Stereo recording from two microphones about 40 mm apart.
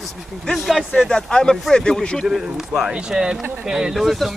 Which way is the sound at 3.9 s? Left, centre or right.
Centre.